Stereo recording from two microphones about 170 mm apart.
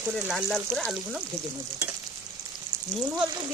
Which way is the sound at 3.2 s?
25° right (ahead or behind).